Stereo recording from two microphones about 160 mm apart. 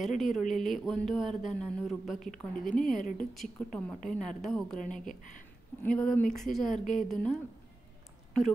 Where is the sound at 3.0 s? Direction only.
55° left (ahead or behind).